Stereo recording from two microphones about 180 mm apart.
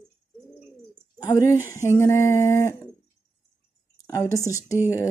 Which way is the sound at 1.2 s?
15° left (ahead or behind).